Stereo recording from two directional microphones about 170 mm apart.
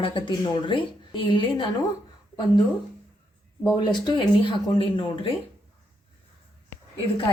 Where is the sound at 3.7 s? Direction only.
25° left (ahead or behind).